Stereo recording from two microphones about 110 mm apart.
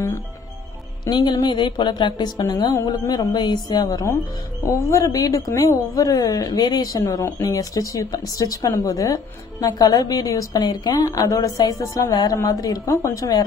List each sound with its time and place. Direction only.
1.0 s a woman's voice: 40° left (ahead or behind)